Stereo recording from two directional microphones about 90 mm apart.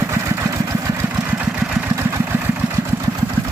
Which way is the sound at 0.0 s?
30° right (ahead or behind).